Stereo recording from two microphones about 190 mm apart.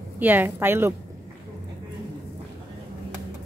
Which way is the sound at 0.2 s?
10° right (ahead or behind).